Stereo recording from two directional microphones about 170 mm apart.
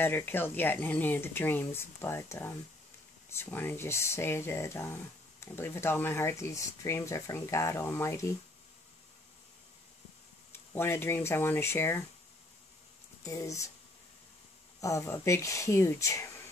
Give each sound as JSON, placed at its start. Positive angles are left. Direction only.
{"t": 0.0, "sound": "speech", "side_deg": 10}
{"t": 10.5, "sound": "speech", "side_deg": 15}
{"t": 13.2, "sound": "speech", "side_deg": 20}
{"t": 14.8, "sound": "speech", "side_deg": 15}